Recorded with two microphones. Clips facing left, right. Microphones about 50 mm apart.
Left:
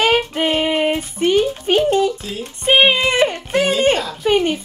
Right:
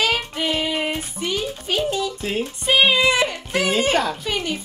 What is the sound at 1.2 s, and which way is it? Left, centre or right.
Speech, left.